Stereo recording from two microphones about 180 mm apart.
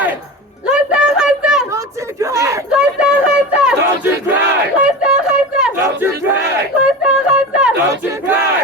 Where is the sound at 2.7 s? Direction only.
5° right (ahead or behind).